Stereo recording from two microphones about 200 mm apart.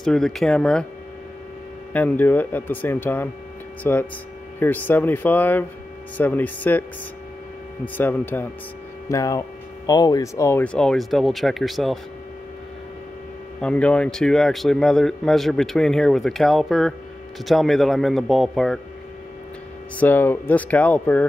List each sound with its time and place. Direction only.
0.0 s a man's voice: centre (ahead or behind)
1.9 s a man's voice: 10° left (ahead or behind)
7.8 s a man's voice: 10° left (ahead or behind)
13.6 s a man's voice: 5° left (ahead or behind)
20.0 s a man's voice: 10° left (ahead or behind)